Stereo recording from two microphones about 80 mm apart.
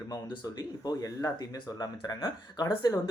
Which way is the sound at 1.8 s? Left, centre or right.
Left.